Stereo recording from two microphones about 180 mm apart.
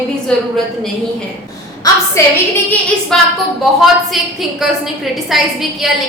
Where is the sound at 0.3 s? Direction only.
5° left (ahead or behind).